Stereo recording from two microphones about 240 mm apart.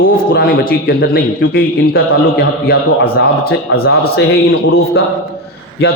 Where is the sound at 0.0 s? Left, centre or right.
Left.